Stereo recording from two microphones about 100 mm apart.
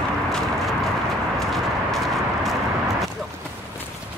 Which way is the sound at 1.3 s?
Centre (ahead or behind).